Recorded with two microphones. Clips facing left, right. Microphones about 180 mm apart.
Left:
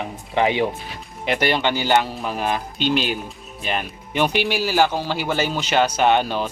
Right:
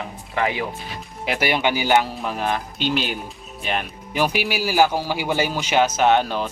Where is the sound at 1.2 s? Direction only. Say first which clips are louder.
Left 1 dB; 5° right (ahead or behind).